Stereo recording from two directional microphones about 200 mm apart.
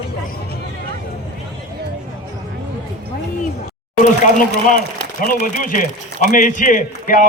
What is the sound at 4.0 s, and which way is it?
A man's voice, 40° left (ahead or behind).